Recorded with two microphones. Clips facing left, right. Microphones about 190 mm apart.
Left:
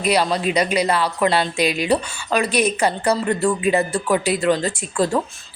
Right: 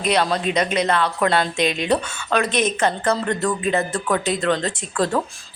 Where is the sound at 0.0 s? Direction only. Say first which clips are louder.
Left 1 dB; 5° left (ahead or behind).